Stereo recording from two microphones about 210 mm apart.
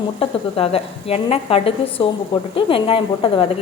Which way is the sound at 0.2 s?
25° left (ahead or behind).